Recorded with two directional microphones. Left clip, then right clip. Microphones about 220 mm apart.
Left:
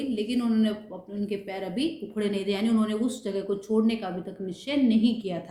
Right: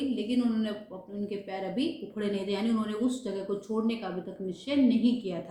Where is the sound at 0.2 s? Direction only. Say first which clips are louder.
Left 3 dB; 45° left (ahead or behind).